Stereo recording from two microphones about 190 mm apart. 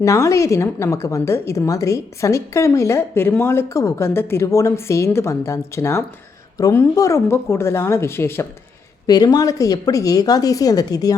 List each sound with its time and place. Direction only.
0.0 s a woman's voice: 15° left (ahead or behind)